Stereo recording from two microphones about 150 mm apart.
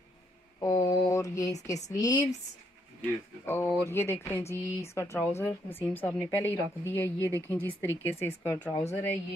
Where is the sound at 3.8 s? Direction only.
15° left (ahead or behind).